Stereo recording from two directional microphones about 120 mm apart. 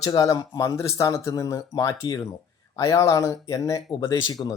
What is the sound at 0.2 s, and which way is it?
Speech, 30° left (ahead or behind).